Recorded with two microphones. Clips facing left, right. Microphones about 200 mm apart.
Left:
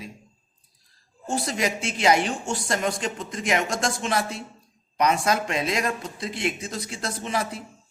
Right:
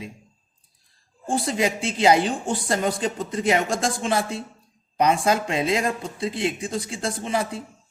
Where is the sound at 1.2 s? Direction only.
30° right (ahead or behind).